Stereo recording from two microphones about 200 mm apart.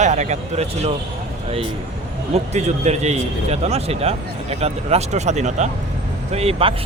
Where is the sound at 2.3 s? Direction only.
35° right (ahead or behind).